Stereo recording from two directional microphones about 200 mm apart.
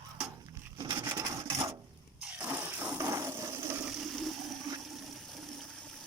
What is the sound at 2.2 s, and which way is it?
Toilet flush, 5° right (ahead or behind).